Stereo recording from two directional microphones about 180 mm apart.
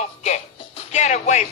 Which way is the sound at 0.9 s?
40° left (ahead or behind).